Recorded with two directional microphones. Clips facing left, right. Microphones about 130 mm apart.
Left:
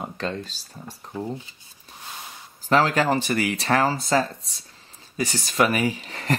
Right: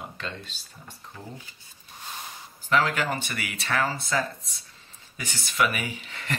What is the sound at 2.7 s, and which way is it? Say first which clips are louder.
Speech: left 5 dB; 35° left (ahead or behind).